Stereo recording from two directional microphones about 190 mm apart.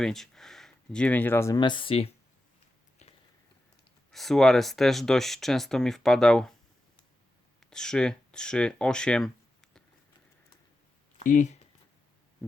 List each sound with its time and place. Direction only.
0.0 s speech: centre (ahead or behind); by 2.0 s 30° left (ahead or behind)
4.1 s speech: centre (ahead or behind)
7.6 s speech: 5° left (ahead or behind)
11.2 s speech: 40° left (ahead or behind)